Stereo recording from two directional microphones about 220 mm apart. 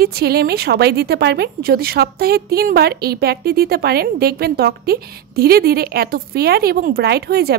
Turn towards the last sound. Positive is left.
turn(degrees=-45)  # may be behind; listen again after turning